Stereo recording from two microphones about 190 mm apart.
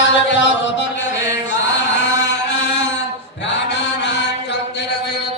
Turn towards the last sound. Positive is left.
turn(degrees=65)  # may be behind; listen again after turning